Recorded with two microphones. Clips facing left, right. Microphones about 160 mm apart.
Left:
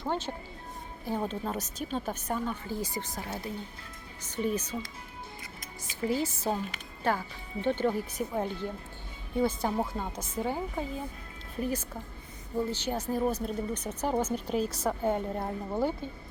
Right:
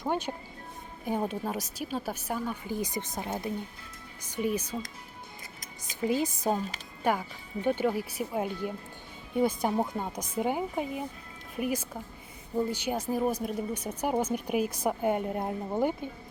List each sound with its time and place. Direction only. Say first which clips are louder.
0.0 s speech: right 2 dB; 15° right (ahead or behind)
6.1 s speech: right 2 dB; 15° right (ahead or behind)